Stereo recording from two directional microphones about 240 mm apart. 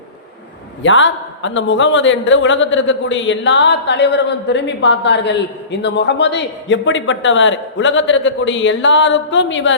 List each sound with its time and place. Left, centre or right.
0.8 s a man's voice: left